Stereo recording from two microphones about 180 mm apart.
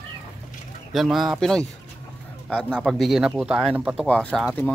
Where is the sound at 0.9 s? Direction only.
Centre (ahead or behind).